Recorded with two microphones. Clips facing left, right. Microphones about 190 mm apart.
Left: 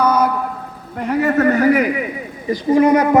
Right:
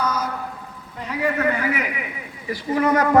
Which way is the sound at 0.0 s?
60° left (ahead or behind).